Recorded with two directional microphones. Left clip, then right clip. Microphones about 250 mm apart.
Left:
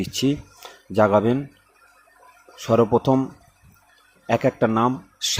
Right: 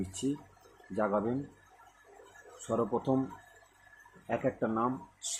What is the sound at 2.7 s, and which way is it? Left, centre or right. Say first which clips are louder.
Speech: left 13 dB; left.